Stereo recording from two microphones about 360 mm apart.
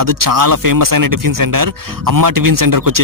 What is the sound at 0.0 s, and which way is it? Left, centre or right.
Speech, right.